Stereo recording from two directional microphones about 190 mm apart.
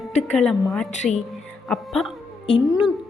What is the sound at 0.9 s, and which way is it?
Speech, 40° left (ahead or behind).